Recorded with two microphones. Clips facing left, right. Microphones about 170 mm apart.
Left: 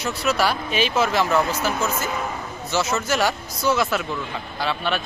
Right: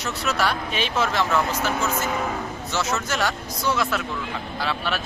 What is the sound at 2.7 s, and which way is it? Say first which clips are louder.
Speech: left 4 dB; 5° left (ahead or behind).